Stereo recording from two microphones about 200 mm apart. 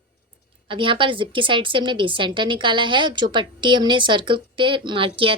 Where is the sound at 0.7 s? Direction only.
25° right (ahead or behind).